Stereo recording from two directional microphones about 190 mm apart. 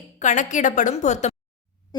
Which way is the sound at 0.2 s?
40° left (ahead or behind).